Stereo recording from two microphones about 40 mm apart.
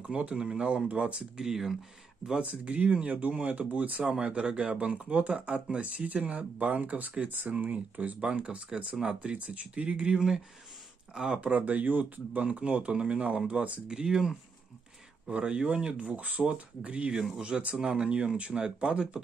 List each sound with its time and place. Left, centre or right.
0.0 s speech: right
1.4 s speech: centre
2.6 s speech: right
4.2 s speech: right
8.2 s speech: right
10.1 s speech: centre
11.5 s speech: right
12.5 s speech: right
13.8 s speech: centre
16.1 s speech: right